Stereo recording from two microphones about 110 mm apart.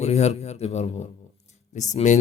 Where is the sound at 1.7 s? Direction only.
90° left.